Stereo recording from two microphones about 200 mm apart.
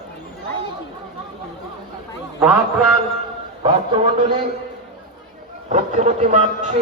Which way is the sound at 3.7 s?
20° right (ahead or behind).